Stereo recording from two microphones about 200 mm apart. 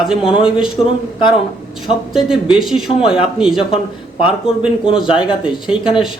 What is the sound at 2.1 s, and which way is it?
Speech, centre (ahead or behind).